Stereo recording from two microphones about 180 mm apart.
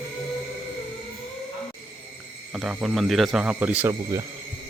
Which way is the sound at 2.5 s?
5° right (ahead or behind).